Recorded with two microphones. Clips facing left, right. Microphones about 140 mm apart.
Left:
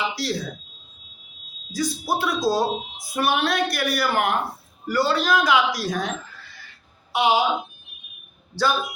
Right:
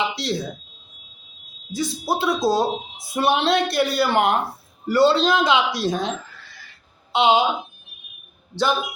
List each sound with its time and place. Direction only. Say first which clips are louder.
0.1 s speech: right 1 dB; 25° right (ahead or behind)
1.7 s speech: right 1 dB; 25° right (ahead or behind)
8.5 s speech: right 1 dB; 20° right (ahead or behind)